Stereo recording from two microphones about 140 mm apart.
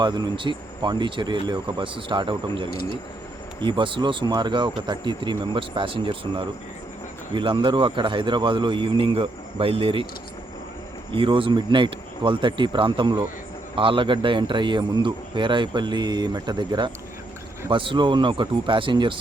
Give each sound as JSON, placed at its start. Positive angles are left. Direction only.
{"t": 0.0, "sound": "a man's voice", "side_deg": -30}
{"t": 11.1, "sound": "a man's voice", "side_deg": -40}